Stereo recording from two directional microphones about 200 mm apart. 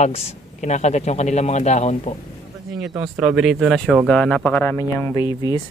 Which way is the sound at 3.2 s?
5° right (ahead or behind).